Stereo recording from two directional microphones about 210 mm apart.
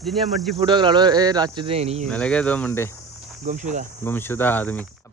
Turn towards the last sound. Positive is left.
turn(degrees=10)  # may be behind; listen again after turning